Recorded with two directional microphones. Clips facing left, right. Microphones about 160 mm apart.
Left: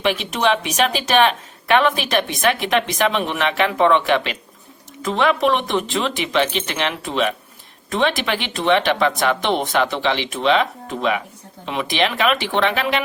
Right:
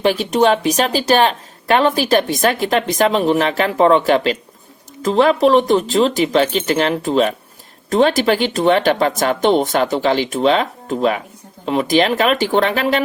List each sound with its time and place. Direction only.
0.0 s speech: 35° right (ahead or behind)